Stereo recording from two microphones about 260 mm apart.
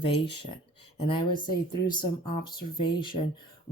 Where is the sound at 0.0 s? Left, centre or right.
Centre.